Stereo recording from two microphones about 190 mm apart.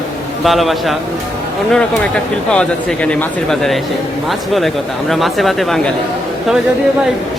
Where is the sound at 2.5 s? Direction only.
5° left (ahead or behind).